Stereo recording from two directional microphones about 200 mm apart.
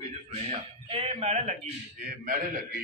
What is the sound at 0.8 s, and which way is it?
A man's voice, 30° right (ahead or behind).